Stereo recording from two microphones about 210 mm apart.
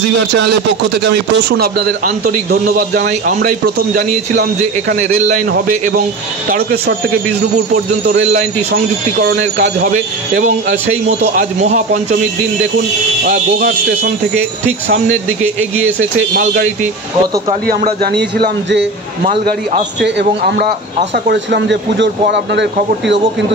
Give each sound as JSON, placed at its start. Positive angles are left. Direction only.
{"t": 1.0, "sound": "a man's voice", "side_deg": -45}
{"t": 6.5, "sound": "a man's voice", "side_deg": -45}
{"t": 10.3, "sound": "a man's voice", "side_deg": -35}
{"t": 17.6, "sound": "a man's voice", "side_deg": -45}
{"t": 20.0, "sound": "speech", "side_deg": -55}